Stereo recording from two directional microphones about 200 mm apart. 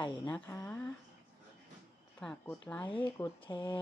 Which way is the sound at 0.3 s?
10° left (ahead or behind).